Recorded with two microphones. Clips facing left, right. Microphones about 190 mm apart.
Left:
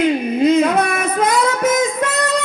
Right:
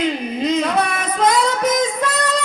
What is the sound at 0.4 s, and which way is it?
Music, 50° left (ahead or behind).